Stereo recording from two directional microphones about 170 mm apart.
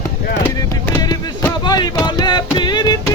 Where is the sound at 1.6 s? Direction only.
25° left (ahead or behind).